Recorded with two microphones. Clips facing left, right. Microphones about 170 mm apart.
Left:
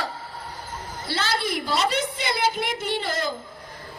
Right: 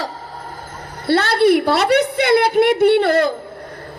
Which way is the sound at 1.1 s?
60° right (ahead or behind).